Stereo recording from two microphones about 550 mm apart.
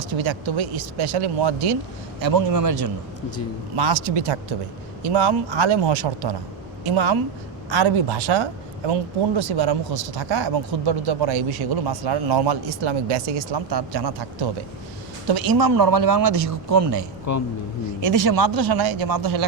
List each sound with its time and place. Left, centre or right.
0.0 s speech: right
2.2 s speech: right
3.9 s speech: right
17.3 s a man's voice: left
18.0 s speech: right